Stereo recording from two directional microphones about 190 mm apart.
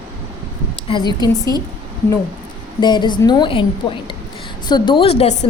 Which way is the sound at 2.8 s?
25° left (ahead or behind).